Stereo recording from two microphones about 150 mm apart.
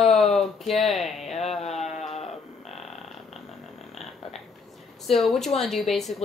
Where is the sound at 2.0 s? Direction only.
45° left (ahead or behind).